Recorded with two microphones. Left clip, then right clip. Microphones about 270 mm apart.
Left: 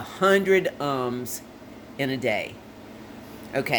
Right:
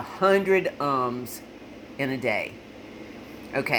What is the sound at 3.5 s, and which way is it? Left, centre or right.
Speech, centre.